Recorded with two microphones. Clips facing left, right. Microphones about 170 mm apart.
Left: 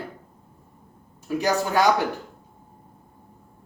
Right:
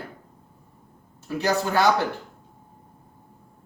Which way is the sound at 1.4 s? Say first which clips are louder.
Even; 15° left (ahead or behind).